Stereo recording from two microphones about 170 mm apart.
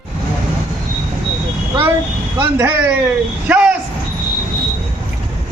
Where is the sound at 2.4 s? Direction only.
15° right (ahead or behind).